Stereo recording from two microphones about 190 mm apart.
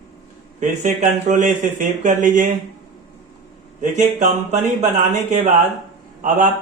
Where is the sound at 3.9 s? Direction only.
40° right (ahead or behind).